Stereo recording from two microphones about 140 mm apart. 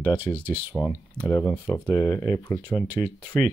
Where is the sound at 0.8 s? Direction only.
25° left (ahead or behind).